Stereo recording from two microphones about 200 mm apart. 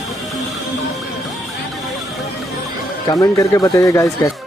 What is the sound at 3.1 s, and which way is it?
Speech, 15° left (ahead or behind).